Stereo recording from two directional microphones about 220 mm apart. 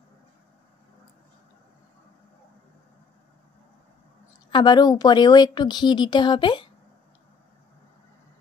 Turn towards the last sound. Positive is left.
turn(degrees=20)  # may be behind; listen again after turning